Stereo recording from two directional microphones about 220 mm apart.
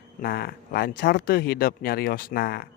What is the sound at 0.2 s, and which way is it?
Speech, 45° left (ahead or behind).